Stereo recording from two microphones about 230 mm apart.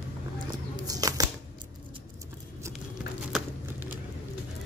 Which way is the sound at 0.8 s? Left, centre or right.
Centre.